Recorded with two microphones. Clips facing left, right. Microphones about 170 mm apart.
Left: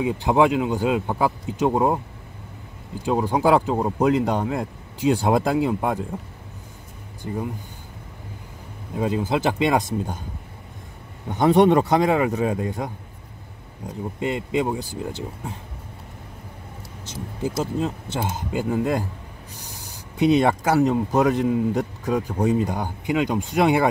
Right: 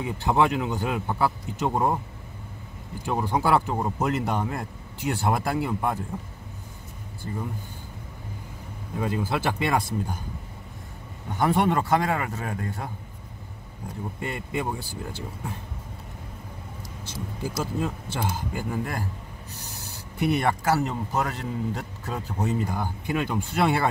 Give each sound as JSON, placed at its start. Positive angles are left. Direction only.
{"t": 0.0, "sound": "speech", "side_deg": 15}
{"t": 3.1, "sound": "speech", "side_deg": 15}
{"t": 7.2, "sound": "speech", "side_deg": 20}
{"t": 9.0, "sound": "speech", "side_deg": 20}
{"t": 11.3, "sound": "speech", "side_deg": 20}
{"t": 14.2, "sound": "speech", "side_deg": 15}
{"t": 17.0, "sound": "speech", "side_deg": 20}